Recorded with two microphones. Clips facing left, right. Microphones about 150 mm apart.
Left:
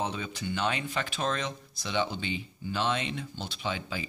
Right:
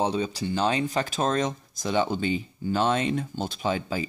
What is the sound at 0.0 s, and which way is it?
Speech, 35° right (ahead or behind).